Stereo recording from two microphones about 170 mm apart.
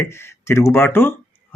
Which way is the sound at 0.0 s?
15° left (ahead or behind).